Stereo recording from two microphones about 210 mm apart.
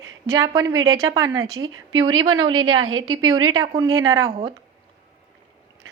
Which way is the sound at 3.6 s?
15° right (ahead or behind).